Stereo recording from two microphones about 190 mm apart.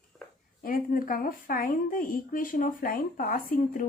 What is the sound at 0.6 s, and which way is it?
A woman's voice, 50° left (ahead or behind).